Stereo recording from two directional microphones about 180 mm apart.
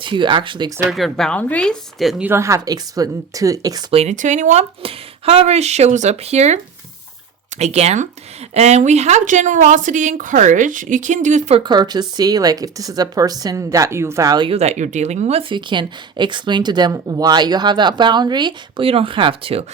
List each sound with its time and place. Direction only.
0.0 s speech: 25° right (ahead or behind)
0.9 s speech: centre (ahead or behind); by 3.8 s 20° right (ahead or behind)
3.9 s speech: 40° right (ahead or behind)
4.8 s speech: 30° right (ahead or behind)
7.6 s speech: 35° right (ahead or behind)
11.6 s speech: 25° right (ahead or behind)
14.5 s speech: 35° right (ahead or behind)